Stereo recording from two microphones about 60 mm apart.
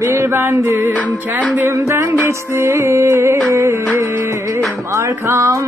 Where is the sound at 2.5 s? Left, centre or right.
Right.